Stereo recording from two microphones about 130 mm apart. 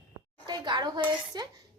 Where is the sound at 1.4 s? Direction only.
35° right (ahead or behind).